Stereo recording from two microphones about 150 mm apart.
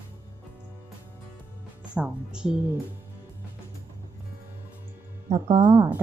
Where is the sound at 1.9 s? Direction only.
5° right (ahead or behind).